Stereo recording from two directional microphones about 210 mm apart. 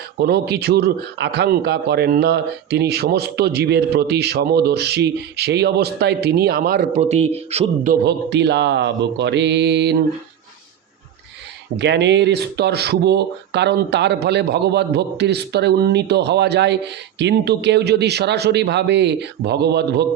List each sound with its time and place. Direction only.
0.2 s a man's voice: 50° right (ahead or behind); by 7.9 s 30° right (ahead or behind)
8.0 s speech: 55° right (ahead or behind)
11.8 s a man's voice: 55° right (ahead or behind)